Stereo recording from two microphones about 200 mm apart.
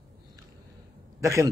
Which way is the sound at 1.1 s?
15° right (ahead or behind).